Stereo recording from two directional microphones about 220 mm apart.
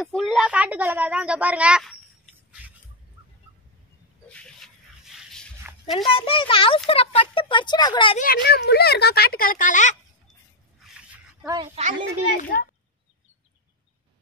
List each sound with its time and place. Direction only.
0.0 s speech: centre (ahead or behind)
4.3 s a sound: 5° left (ahead or behind)
5.9 s speech: 25° left (ahead or behind)
8.5 s speech: 45° left (ahead or behind)
10.8 s a sound: centre (ahead or behind)
11.4 s a woman's voice: 20° right (ahead or behind)
12.5 s speech: 45° left (ahead or behind)